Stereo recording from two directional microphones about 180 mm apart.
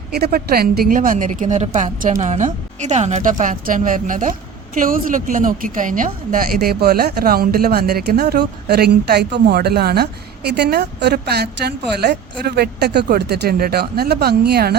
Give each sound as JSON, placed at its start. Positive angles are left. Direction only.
{"t": 0.1, "sound": "a woman's voice", "side_deg": -60}